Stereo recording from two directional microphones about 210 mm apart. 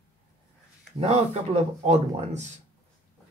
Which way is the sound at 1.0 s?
30° right (ahead or behind).